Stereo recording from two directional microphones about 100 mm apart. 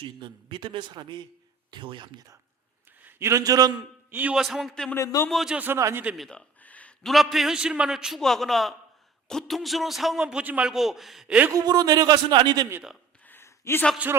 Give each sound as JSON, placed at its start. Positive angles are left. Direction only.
{"t": 0.0, "sound": "a man's voice", "side_deg": -55}
{"t": 3.0, "sound": "a man's voice", "side_deg": -25}
{"t": 4.1, "sound": "speech", "side_deg": -15}
{"t": 4.4, "sound": "a man's voice", "side_deg": 0}
{"t": 4.9, "sound": "a man's voice", "side_deg": 30}
{"t": 5.3, "sound": "a man's voice", "side_deg": 0}
{"t": 5.5, "sound": "speech", "side_deg": -20}
{"t": 6.1, "sound": "a man's voice", "side_deg": 5}
{"t": 6.6, "sound": "a sound", "side_deg": 15}
{"t": 7.0, "sound": "a man's voice", "side_deg": 0}
{"t": 11.5, "sound": "speech", "side_deg": -40}
{"t": 13.2, "sound": "a sound", "side_deg": 25}